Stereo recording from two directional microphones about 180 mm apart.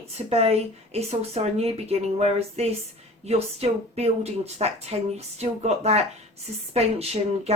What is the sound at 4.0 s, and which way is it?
Speech, 35° right (ahead or behind).